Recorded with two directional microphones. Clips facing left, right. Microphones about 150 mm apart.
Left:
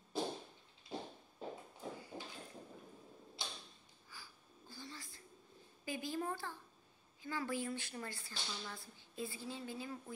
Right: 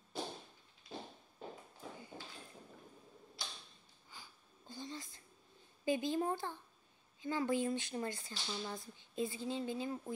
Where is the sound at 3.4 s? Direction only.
25° left (ahead or behind).